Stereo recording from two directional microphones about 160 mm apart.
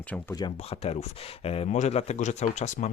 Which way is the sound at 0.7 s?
40° left (ahead or behind).